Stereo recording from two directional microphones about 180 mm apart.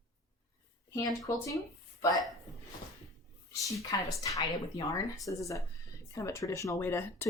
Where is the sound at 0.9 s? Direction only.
20° left (ahead or behind).